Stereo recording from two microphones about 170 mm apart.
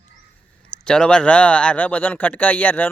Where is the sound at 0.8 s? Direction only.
5° left (ahead or behind).